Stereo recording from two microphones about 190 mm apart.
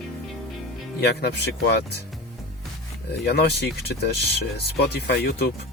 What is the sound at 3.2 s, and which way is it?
Speech, 60° left (ahead or behind).